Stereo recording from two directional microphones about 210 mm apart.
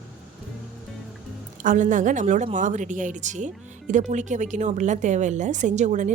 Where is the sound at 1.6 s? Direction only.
35° right (ahead or behind).